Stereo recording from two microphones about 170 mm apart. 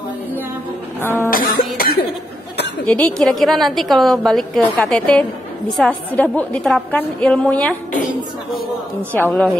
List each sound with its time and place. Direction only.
1.3 s cough: 55° left (ahead or behind)
2.9 s a woman's voice: 5° left (ahead or behind)
9.1 s a woman's voice: 10° left (ahead or behind)